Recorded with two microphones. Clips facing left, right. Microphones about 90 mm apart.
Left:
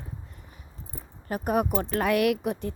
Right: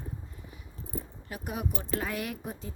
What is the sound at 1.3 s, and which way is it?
A woman's voice, 50° left (ahead or behind).